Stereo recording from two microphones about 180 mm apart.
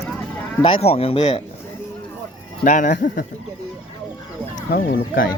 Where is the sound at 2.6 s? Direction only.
45° left (ahead or behind).